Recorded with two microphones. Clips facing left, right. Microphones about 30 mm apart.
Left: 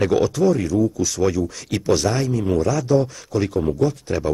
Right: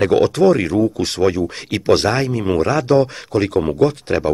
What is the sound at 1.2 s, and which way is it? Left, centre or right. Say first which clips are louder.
Speech: right 4 dB; right.